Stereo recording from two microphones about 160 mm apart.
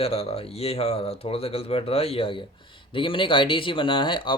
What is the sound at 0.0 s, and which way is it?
Speech, 40° left (ahead or behind).